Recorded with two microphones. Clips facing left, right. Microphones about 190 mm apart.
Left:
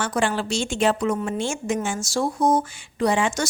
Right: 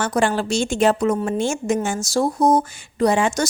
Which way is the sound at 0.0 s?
45° right (ahead or behind).